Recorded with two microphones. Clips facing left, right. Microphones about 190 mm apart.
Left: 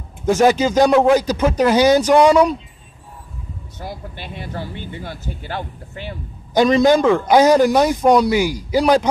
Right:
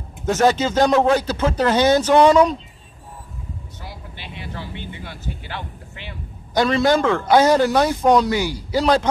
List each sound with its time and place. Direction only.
0.3 s a man's voice: 10° left (ahead or behind)
3.8 s speech: 45° left (ahead or behind)
6.5 s a man's voice: 15° left (ahead or behind)